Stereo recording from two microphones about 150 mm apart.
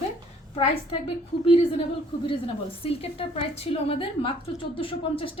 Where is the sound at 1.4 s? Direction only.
40° left (ahead or behind).